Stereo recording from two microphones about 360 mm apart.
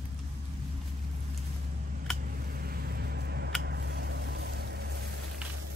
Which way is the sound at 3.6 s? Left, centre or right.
Right.